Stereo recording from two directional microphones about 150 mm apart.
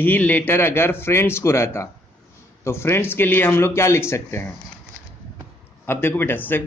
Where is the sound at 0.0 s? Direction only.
10° left (ahead or behind).